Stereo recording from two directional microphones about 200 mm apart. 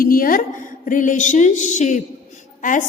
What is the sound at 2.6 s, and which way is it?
Speech, 40° left (ahead or behind).